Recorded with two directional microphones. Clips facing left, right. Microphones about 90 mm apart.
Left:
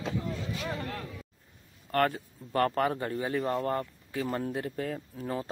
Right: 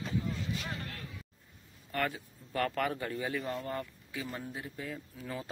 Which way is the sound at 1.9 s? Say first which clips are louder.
Left 7 dB; 55° left (ahead or behind).